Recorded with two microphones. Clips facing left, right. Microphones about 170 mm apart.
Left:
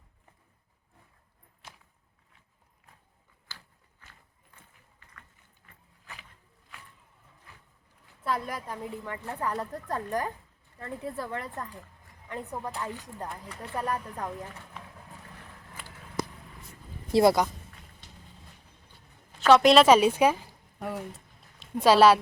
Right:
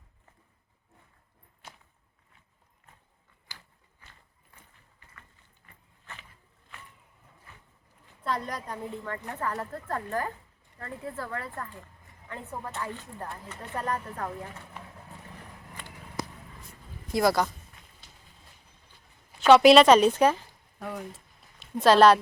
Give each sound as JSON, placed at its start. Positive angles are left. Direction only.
{"t": 3.5, "sound": "walk", "side_deg": -15}
{"t": 4.0, "sound": "a sound", "side_deg": -10}
{"t": 8.2, "sound": "a woman's voice", "side_deg": 5}
{"t": 14.3, "sound": "speech", "side_deg": -5}
{"t": 15.8, "sound": "a sound", "side_deg": 0}
{"t": 17.1, "sound": "speech", "side_deg": 30}
{"t": 19.4, "sound": "a woman's voice", "side_deg": 0}